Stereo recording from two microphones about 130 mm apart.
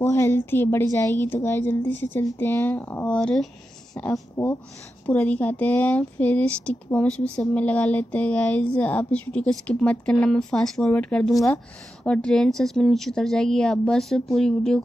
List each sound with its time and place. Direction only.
0.0 s a woman's voice: 20° left (ahead or behind); by 14.8 s 5° left (ahead or behind)